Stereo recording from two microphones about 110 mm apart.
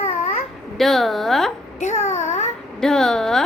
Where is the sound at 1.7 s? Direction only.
90° left.